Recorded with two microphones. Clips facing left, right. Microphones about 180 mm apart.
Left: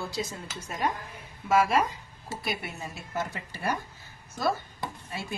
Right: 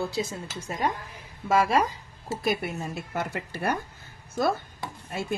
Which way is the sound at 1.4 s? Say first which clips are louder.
Right 1 dB; 30° right (ahead or behind).